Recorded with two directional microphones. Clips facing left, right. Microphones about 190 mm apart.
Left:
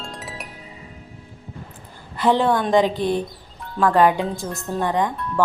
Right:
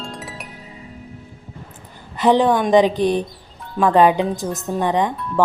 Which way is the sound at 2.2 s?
20° right (ahead or behind).